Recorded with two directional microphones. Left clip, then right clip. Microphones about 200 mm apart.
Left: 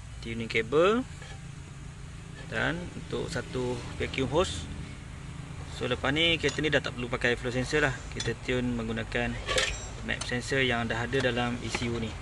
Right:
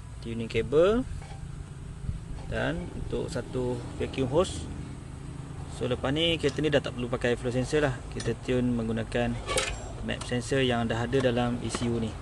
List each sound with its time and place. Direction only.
0.2 s speech: 15° right (ahead or behind)
2.5 s speech: 15° right (ahead or behind)
5.8 s speech: 15° right (ahead or behind)